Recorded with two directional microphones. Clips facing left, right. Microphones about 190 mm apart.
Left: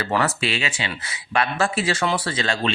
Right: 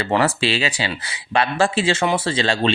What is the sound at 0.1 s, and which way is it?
Speech, 30° right (ahead or behind).